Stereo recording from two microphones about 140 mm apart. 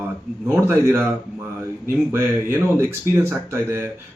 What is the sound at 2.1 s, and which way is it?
Speech, 20° right (ahead or behind).